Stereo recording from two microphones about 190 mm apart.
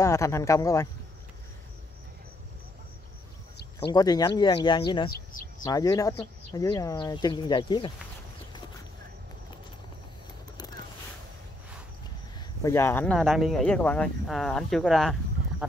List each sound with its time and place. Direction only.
0.0 s speech: 15° left (ahead or behind)
3.9 s speech: 20° left (ahead or behind)
12.4 s speech: 15° left (ahead or behind)